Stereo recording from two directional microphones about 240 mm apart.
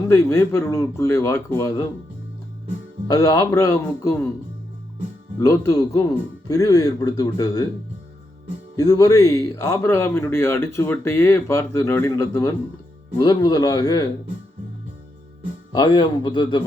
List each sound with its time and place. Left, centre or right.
0.1 s speech: centre
3.1 s speech: centre
5.4 s speech: centre
8.7 s speech: centre
15.7 s speech: centre